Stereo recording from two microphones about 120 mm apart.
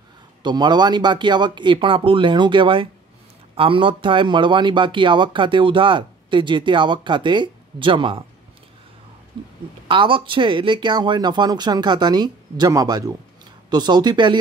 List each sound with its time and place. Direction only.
0.4 s speech: 40° right (ahead or behind)
9.8 s speech: 45° right (ahead or behind)